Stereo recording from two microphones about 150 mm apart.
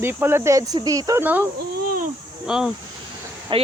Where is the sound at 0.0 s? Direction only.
15° right (ahead or behind).